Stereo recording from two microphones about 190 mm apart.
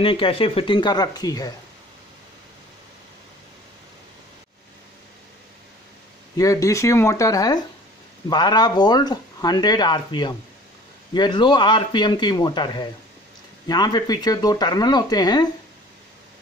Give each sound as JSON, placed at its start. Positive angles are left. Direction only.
{"t": 0.0, "sound": "speech", "side_deg": 30}
{"t": 6.3, "sound": "speech", "side_deg": 15}